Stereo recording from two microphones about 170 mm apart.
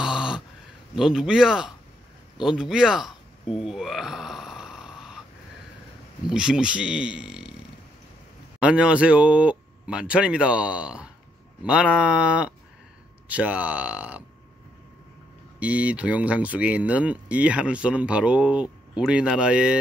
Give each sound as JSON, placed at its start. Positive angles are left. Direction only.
{"t": 0.0, "sound": "a sound", "side_deg": -5}
{"t": 0.9, "sound": "speech", "side_deg": -5}
{"t": 3.5, "sound": "snoring", "side_deg": 0}
{"t": 6.2, "sound": "speech", "side_deg": -5}
{"t": 8.5, "sound": "speech", "side_deg": -5}
{"t": 15.6, "sound": "speech", "side_deg": -10}